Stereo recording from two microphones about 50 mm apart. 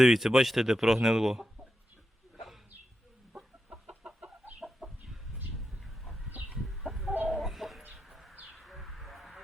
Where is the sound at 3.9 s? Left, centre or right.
Centre.